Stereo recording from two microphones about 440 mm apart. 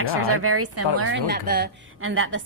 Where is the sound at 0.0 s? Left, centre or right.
Right.